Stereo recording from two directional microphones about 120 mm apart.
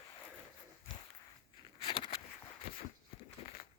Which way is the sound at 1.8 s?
45° left (ahead or behind).